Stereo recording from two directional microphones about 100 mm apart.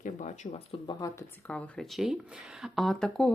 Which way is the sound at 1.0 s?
40° left (ahead or behind).